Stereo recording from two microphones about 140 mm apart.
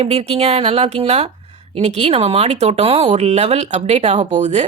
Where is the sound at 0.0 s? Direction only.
45° right (ahead or behind).